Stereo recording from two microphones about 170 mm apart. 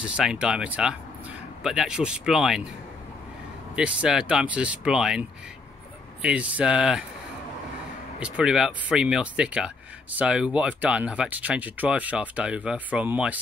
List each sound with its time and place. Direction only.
0.0 s speech: 5° right (ahead or behind)
3.7 s speech: 5° right (ahead or behind)
6.2 s speech: 5° right (ahead or behind)
8.2 s speech: 5° right (ahead or behind)